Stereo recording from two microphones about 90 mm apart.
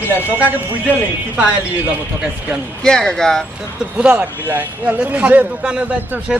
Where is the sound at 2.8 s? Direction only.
5° left (ahead or behind).